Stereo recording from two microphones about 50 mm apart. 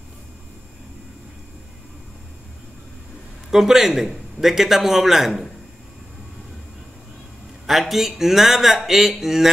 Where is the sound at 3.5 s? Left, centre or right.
Centre.